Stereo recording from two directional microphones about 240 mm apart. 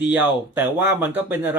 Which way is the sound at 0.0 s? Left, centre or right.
Centre.